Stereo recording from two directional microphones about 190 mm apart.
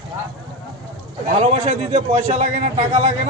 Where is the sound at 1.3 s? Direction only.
35° right (ahead or behind).